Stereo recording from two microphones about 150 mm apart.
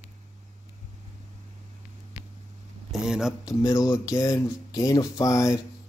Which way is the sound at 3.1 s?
5° right (ahead or behind).